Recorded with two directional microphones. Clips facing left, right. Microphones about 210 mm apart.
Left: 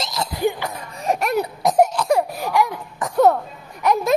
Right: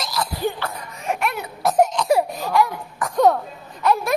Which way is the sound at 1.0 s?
40° left (ahead or behind).